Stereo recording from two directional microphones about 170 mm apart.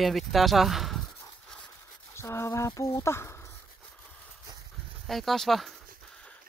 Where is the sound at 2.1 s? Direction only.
15° left (ahead or behind).